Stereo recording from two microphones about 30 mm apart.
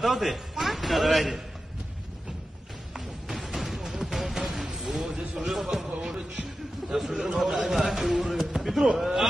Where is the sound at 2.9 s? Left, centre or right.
Centre.